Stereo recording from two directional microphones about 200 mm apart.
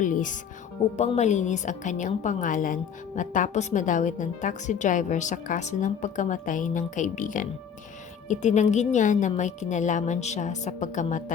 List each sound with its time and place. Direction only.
0.0 s speech: 40° left (ahead or behind)